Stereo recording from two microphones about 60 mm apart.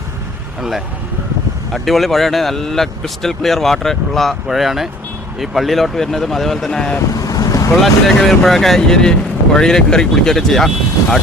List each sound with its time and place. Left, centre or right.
1.7 s speech: centre
7.1 s boat: left
7.8 s speech: centre